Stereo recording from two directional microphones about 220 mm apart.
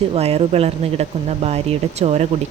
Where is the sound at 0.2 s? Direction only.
30° right (ahead or behind).